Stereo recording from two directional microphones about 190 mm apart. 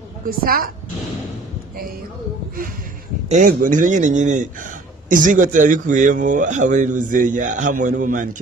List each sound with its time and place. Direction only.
0.3 s speech: 50° right (ahead or behind)
3.3 s a man's voice: 45° right (ahead or behind)